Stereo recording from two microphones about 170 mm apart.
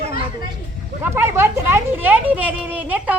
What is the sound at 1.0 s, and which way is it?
Speech, 15° right (ahead or behind).